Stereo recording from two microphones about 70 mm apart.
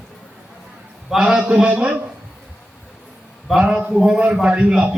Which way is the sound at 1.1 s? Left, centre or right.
Centre.